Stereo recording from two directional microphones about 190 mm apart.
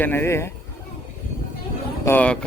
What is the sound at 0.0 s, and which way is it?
Speech, 10° left (ahead or behind).